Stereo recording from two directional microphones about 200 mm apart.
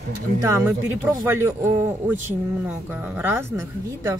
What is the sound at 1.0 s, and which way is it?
A woman's voice, 10° right (ahead or behind).